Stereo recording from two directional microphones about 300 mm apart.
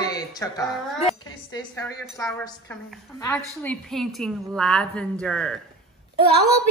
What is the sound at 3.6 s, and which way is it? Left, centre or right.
A woman's voice, centre.